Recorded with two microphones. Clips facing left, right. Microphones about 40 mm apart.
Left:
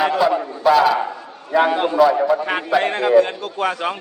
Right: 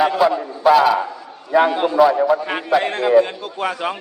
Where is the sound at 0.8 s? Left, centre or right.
Centre.